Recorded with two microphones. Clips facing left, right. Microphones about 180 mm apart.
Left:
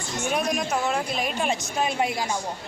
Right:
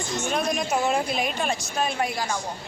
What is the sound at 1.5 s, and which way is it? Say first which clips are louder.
Speech: left 1 dB; 20° left (ahead or behind).